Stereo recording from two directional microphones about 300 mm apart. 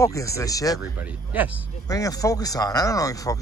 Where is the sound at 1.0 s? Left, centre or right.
Centre.